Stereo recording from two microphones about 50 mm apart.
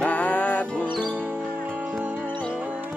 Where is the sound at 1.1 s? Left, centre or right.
Right.